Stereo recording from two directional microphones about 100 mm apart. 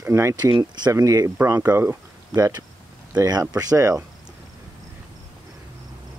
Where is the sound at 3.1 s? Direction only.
40° right (ahead or behind).